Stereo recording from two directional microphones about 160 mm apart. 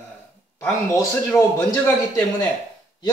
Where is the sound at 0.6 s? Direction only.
20° left (ahead or behind).